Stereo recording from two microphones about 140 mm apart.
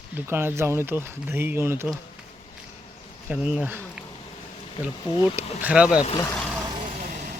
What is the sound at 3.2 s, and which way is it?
Speech, 10° right (ahead or behind).